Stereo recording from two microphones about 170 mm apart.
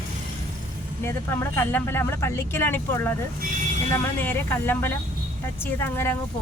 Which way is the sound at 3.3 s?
55° right (ahead or behind).